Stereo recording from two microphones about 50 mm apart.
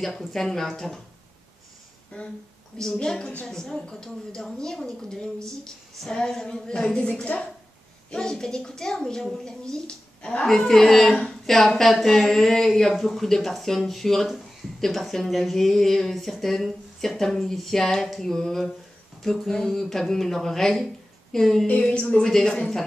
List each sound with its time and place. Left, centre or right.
0.0 s a woman's voice: centre
2.1 s speech: left
2.8 s a woman's voice: centre